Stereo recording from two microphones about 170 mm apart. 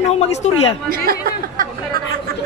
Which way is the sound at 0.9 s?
60° right (ahead or behind).